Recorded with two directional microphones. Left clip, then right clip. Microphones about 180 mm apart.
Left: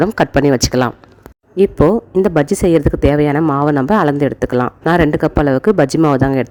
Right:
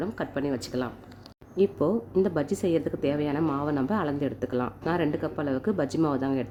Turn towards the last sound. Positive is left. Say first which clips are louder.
# left 14 dB
turn(degrees=55)  # may be behind; listen again after turning